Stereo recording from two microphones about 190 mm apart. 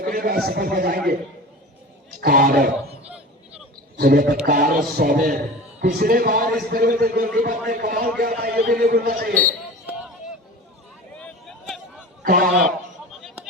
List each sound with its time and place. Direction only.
0.0 s a man's voice: 50° right (ahead or behind)
2.2 s a man's voice: 50° right (ahead or behind)
3.9 s a man's voice: 50° right (ahead or behind)
11.2 s a sound: 5° left (ahead or behind)
12.2 s a man's voice: 45° right (ahead or behind)